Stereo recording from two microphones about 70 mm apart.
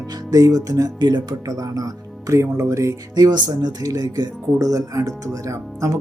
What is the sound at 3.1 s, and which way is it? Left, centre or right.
Speech, right.